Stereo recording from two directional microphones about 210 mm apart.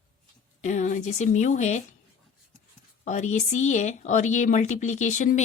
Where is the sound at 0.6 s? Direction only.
35° left (ahead or behind).